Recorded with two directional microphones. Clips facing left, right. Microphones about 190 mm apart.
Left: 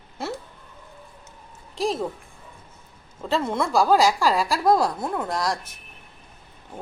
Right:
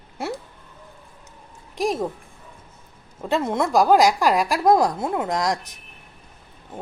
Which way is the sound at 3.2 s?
15° right (ahead or behind).